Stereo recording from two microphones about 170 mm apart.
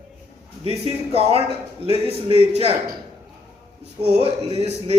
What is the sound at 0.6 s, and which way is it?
A man's voice, 35° right (ahead or behind).